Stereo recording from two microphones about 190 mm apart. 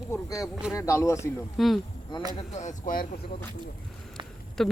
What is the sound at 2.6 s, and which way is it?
Speech, 40° left (ahead or behind).